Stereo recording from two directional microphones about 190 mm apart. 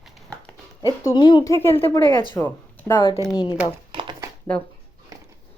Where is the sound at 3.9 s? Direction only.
25° right (ahead or behind).